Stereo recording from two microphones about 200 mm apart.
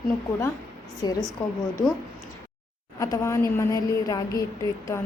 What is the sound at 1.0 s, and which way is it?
Speech, 20° left (ahead or behind).